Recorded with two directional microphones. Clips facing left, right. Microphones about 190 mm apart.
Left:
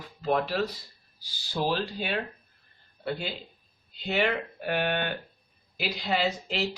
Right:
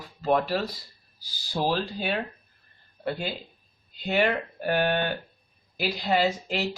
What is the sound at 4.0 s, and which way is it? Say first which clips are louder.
Speech: right 3 dB; 45° right (ahead or behind).